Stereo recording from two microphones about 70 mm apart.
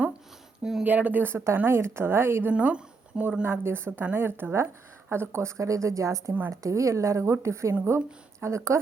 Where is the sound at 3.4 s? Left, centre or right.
Right.